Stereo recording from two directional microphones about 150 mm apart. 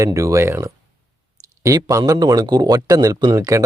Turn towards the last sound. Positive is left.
turn(degrees=-20)  # may be behind; listen again after turning